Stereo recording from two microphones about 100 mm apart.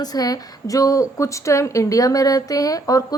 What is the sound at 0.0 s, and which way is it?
A woman's voice, 40° left (ahead or behind).